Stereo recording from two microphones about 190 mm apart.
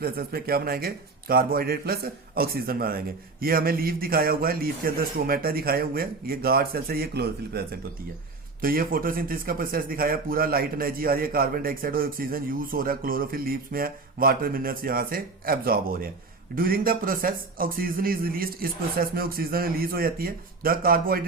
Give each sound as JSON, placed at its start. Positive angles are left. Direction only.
{"t": 0.0, "sound": "a man's voice", "side_deg": -50}